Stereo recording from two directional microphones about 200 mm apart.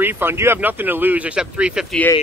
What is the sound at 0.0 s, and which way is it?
Speech, 10° right (ahead or behind).